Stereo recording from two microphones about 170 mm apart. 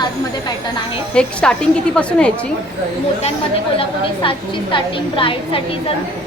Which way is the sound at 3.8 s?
30° left (ahead or behind).